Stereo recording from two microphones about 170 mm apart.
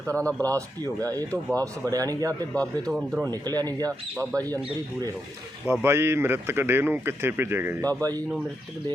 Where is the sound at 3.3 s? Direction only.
25° right (ahead or behind).